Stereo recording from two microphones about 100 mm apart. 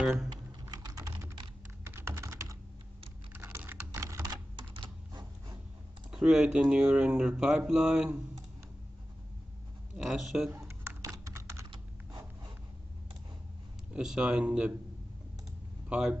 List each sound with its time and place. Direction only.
0.3 s typing: 40° right (ahead or behind)
1.9 s computer keyboard: 25° right (ahead or behind)
3.4 s typing: 25° right (ahead or behind)
4.3 s typing: 50° right (ahead or behind)
6.1 s speech: 5° right (ahead or behind)
10.0 s speech: 5° right (ahead or behind)
11.2 s typing: 30° right (ahead or behind)
13.9 s speech: 10° right (ahead or behind)
15.9 s speech: 10° right (ahead or behind)